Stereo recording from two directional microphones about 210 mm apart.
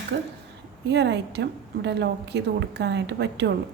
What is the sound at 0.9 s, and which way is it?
A woman's voice, 55° right (ahead or behind).